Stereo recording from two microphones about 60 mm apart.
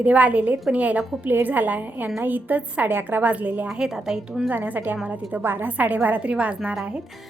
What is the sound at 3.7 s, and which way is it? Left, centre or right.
Speech, centre.